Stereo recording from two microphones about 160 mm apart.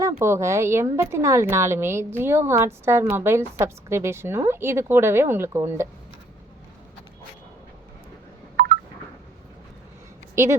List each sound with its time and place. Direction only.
0.2 s a woman's voice: 15° right (ahead or behind)
10.3 s speech: 15° right (ahead or behind)